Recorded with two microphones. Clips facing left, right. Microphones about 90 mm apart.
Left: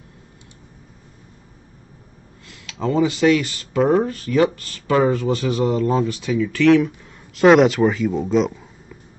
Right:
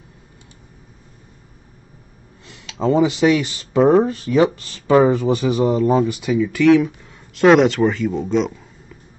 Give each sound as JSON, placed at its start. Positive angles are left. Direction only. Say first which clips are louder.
{"t": 2.4, "sound": "speech", "louder": "right 4 dB", "side_deg": -20}
{"t": 6.6, "sound": "speech", "louder": "right 1 dB", "side_deg": 0}